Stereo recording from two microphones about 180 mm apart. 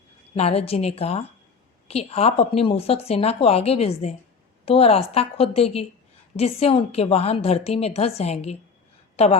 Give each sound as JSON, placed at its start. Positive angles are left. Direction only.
{"t": 0.3, "sound": "a woman's voice", "side_deg": 35}